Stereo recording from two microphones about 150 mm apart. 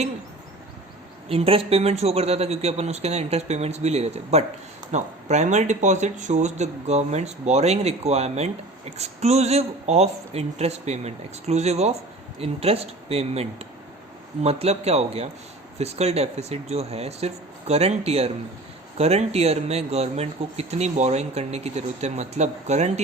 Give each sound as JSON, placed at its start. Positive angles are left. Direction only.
{"t": 1.3, "sound": "speech", "side_deg": -40}